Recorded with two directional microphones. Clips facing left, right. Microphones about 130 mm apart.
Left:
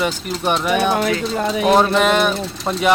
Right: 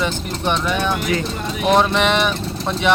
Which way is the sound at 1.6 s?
Centre (ahead or behind).